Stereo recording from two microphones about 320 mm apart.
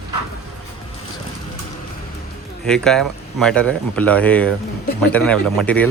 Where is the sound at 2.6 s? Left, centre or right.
Centre.